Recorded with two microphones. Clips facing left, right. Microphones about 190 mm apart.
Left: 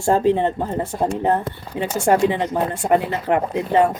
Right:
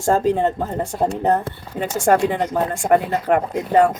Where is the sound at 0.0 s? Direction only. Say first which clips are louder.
Even; 45° right (ahead or behind).